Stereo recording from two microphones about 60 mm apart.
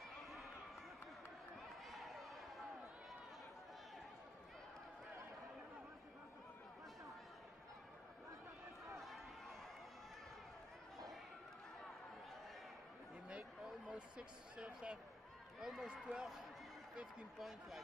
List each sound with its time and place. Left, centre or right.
1.9 s a sound: centre
13.8 s speech: centre
15.6 s speech: centre